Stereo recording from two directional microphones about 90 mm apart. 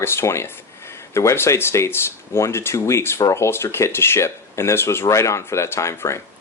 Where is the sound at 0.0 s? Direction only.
30° left (ahead or behind).